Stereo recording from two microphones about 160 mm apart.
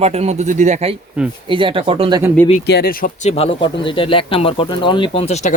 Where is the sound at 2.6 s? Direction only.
80° left; by 3.3 s 60° left (ahead or behind).